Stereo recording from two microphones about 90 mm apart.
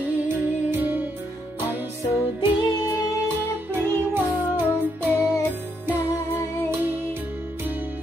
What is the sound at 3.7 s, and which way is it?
Music, 25° right (ahead or behind).